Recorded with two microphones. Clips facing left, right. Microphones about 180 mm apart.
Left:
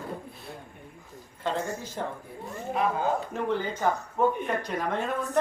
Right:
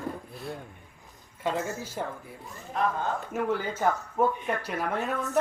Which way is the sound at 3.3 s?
10° right (ahead or behind).